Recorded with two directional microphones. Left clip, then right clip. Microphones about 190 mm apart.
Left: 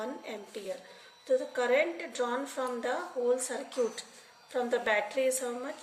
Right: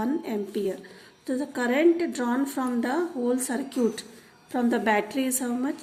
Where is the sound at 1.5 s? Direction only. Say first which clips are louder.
Right 6 dB; 45° right (ahead or behind).